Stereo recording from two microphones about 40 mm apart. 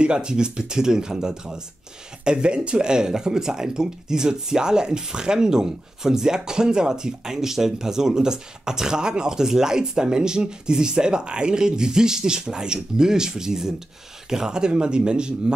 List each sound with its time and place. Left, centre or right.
0.0 s speech: right